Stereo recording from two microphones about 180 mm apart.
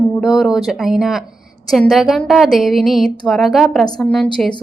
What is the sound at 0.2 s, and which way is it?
A woman's voice, centre (ahead or behind).